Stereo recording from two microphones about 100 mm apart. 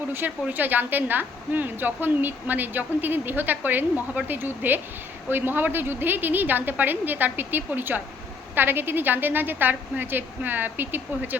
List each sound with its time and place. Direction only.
0.1 s a woman's voice: 15° right (ahead or behind)